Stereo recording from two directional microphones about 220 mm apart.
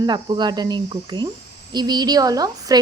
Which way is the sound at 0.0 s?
20° right (ahead or behind).